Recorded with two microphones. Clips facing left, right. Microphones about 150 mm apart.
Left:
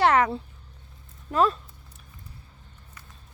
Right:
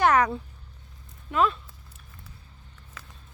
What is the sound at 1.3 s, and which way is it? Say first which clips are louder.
Speech: left 2 dB; 40° left (ahead or behind).